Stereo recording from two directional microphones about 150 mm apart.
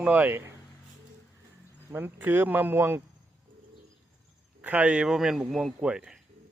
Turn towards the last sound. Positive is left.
turn(degrees=-5)  # may be behind; listen again after turning